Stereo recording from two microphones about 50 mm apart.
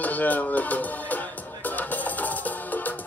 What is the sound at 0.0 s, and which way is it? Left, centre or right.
Music, left.